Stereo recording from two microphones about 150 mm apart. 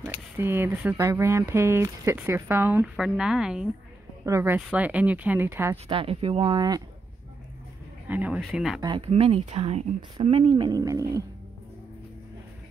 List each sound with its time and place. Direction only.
0.0 s speech: 15° right (ahead or behind)
4.3 s speech: 15° right (ahead or behind)
5.9 s speech: 35° right (ahead or behind)
6.4 s speech: 25° right (ahead or behind)
8.1 s speech: 10° right (ahead or behind)
8.8 s speech: 35° right (ahead or behind)
10.8 s speech: 20° right (ahead or behind)